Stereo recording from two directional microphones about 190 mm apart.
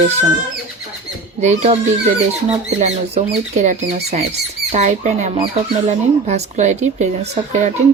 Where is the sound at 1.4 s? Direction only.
40° right (ahead or behind).